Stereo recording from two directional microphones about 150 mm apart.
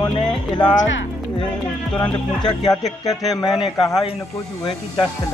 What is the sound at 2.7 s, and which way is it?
Speech, 25° left (ahead or behind).